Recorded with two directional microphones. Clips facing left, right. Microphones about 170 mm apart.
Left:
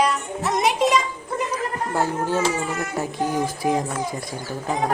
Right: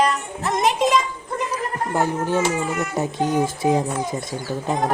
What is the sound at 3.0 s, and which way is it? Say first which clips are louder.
Speech: right 3 dB; 25° right (ahead or behind).